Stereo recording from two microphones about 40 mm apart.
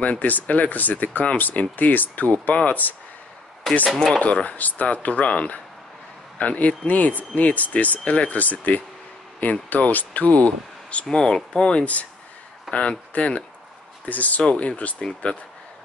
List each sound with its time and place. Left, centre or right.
0.0 s speech: left
3.9 s speech: centre
4.2 s speech: left
11.2 s speech: left
11.8 s speech: left
12.7 s a man's voice: centre
13.1 s speech: left
14.0 s speech: left